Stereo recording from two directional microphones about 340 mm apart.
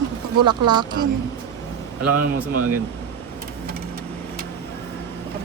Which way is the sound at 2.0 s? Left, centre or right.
Right.